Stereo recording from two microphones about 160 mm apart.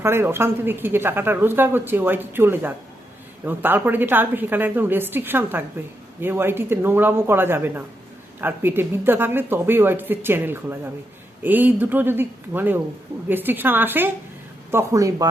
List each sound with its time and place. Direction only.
0.0 s speech: 15° right (ahead or behind)